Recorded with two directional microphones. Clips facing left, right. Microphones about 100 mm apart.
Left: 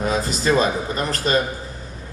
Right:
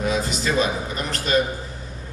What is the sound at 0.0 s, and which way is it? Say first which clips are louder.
A man's voice: left 2 dB; 40° left (ahead or behind).